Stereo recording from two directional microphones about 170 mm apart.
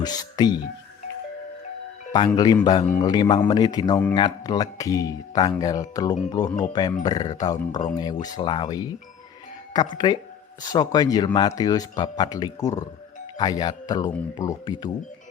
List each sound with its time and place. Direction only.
0.0 s speech: 25° left (ahead or behind)
2.1 s speech: 25° left (ahead or behind)
2.8 s a man's voice: 10° left (ahead or behind)
3.1 s speech: 25° left (ahead or behind)